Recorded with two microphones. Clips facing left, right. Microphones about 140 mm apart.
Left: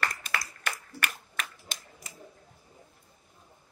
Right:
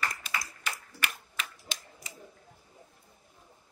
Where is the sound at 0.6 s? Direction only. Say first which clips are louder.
Left 2 dB; 55° left (ahead or behind).